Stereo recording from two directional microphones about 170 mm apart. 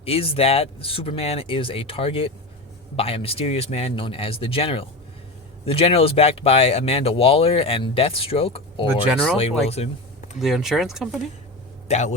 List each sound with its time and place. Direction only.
0.0 s speech: 35° left (ahead or behind)
10.3 s speech: centre (ahead or behind)
11.9 s speech: 45° left (ahead or behind)